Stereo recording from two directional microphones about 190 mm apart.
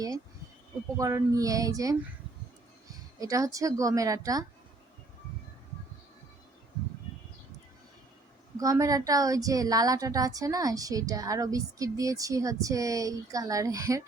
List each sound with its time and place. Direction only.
0.9 s a woman's voice: 15° right (ahead or behind)
8.5 s a woman's voice: 15° right (ahead or behind)